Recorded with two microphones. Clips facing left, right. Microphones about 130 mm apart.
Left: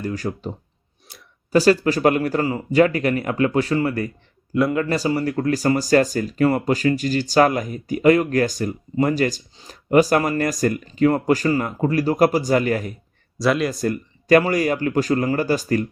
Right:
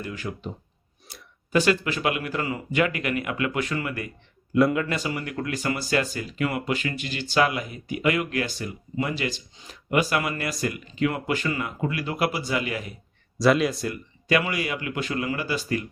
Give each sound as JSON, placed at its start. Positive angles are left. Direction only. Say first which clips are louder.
{"t": 0.0, "sound": "speech", "louder": "left 7 dB", "side_deg": 40}
{"t": 1.5, "sound": "speech", "louder": "left 6 dB", "side_deg": 35}
{"t": 4.5, "sound": "speech", "louder": "left 1 dB", "side_deg": 0}
{"t": 4.8, "sound": "speech", "louder": "left 7 dB", "side_deg": 35}
{"t": 13.4, "sound": "speech", "louder": "even", "side_deg": 0}
{"t": 13.7, "sound": "speech", "louder": "left 8 dB", "side_deg": 45}